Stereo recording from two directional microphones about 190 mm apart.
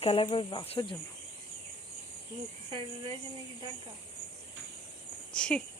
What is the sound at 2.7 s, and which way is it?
Speech, 25° right (ahead or behind).